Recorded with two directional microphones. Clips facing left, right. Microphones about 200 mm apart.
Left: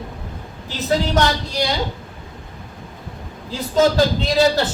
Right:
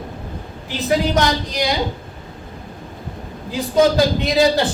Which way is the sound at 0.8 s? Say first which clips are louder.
Right 1 dB; 15° right (ahead or behind).